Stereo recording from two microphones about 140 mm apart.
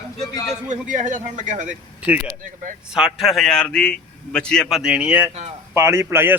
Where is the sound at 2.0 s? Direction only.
10° right (ahead or behind).